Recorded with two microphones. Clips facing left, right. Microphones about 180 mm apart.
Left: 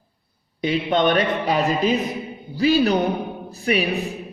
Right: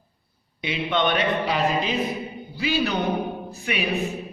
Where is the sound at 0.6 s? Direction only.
40° left (ahead or behind).